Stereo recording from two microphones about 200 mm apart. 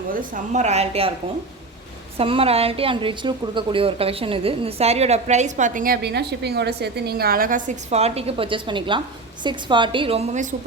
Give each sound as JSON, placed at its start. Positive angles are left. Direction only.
{"t": 0.1, "sound": "a woman's voice", "side_deg": -40}
{"t": 2.1, "sound": "a woman's voice", "side_deg": -30}